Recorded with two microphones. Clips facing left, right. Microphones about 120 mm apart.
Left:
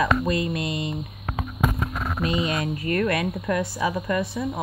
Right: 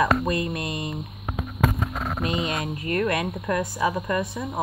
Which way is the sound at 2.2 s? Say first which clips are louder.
Left 3 dB; 30° right (ahead or behind).